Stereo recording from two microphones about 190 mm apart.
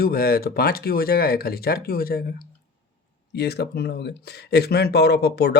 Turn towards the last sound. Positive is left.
turn(degrees=60)  # may be behind; listen again after turning